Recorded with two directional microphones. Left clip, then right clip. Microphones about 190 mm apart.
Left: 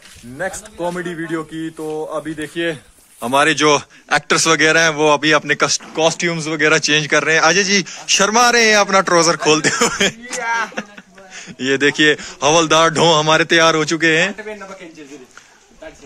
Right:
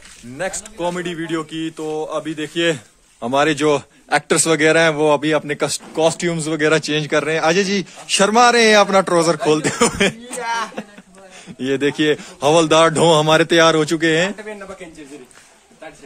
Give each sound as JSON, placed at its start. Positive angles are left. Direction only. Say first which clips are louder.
{"t": 0.4, "sound": "a man's voice", "louder": "even", "side_deg": 0}
{"t": 2.5, "sound": "speech", "louder": "right 4 dB", "side_deg": -55}
{"t": 3.2, "sound": "a man's voice", "louder": "left 3 dB", "side_deg": -5}
{"t": 5.9, "sound": "speech", "louder": "even", "side_deg": -20}
{"t": 6.7, "sound": "a man's voice", "louder": "left 5 dB", "side_deg": -10}
{"t": 10.4, "sound": "speech", "louder": "left 3 dB", "side_deg": -45}
{"t": 11.3, "sound": "a man's voice", "louder": "left 3 dB", "side_deg": -10}